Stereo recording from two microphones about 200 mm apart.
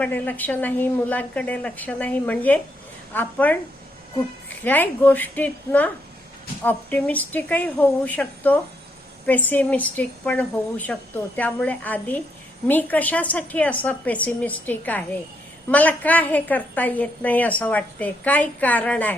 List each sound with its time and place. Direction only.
0.0 s a woman's voice: 10° left (ahead or behind)